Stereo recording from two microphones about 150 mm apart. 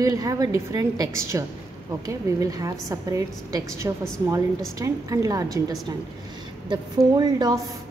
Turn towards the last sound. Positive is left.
turn(degrees=-25)  # may be behind; listen again after turning